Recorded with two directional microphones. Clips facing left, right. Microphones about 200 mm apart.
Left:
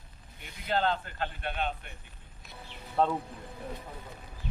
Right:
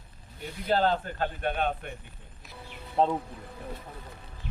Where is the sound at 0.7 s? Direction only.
40° right (ahead or behind).